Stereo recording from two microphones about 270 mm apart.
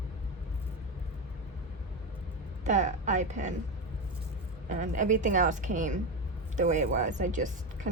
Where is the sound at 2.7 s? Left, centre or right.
Right.